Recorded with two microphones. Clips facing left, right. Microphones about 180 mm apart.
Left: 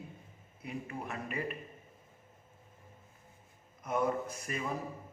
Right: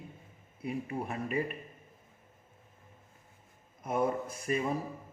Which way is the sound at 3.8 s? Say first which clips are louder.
Right 1 dB; 30° right (ahead or behind).